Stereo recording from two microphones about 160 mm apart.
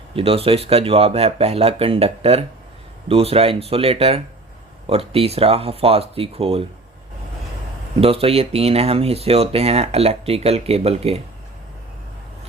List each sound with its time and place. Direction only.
0.2 s speech: 35° right (ahead or behind)
8.0 s speech: 35° right (ahead or behind)